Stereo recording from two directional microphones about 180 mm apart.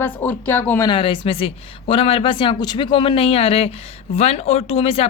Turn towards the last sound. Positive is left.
turn(degrees=35)  # may be behind; listen again after turning